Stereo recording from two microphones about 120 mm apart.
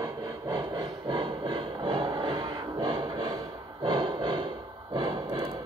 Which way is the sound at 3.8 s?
40° right (ahead or behind).